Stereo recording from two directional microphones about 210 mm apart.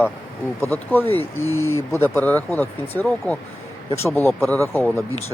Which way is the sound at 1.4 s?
80° left.